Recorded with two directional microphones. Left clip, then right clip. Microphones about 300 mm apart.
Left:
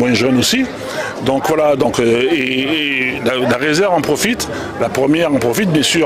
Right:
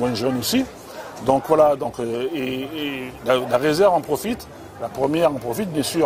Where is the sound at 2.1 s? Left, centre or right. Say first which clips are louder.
Left 11 dB; right.